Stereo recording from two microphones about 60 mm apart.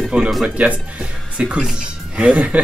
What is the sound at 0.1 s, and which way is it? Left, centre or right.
Speech, right.